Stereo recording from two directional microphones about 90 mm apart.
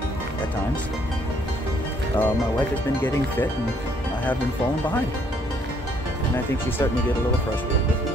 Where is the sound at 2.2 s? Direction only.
20° left (ahead or behind).